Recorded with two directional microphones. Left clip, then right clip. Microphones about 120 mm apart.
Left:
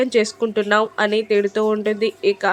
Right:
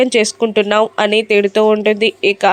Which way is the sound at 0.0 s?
30° right (ahead or behind).